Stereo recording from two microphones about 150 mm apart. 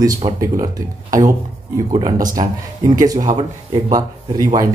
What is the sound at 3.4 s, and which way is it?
Speech, 25° right (ahead or behind).